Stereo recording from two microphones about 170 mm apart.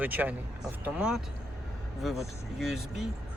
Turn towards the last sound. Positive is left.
turn(degrees=0)  # may be behind; listen again after turning